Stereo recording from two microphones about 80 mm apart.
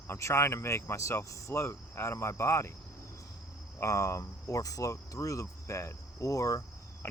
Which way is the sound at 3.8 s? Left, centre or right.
Left.